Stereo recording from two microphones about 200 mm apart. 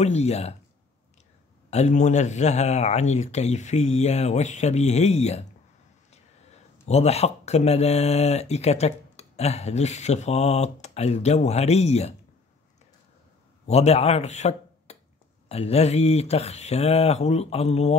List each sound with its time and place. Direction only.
0.0 s speech: 35° left (ahead or behind)
1.7 s speech: 35° left (ahead or behind)
6.9 s speech: 30° left (ahead or behind)
13.7 s speech: 30° left (ahead or behind)